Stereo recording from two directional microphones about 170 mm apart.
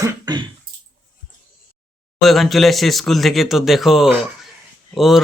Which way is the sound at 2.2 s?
Centre (ahead or behind).